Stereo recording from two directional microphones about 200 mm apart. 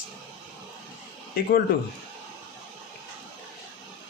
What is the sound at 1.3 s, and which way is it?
Speech, 50° left (ahead or behind).